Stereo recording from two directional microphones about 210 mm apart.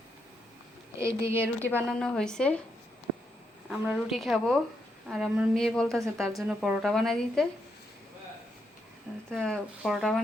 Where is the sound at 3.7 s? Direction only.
5° right (ahead or behind).